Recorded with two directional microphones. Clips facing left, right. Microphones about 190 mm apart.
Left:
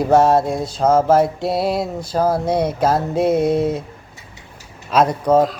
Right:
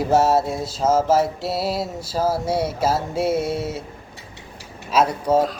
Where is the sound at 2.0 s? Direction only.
5° right (ahead or behind).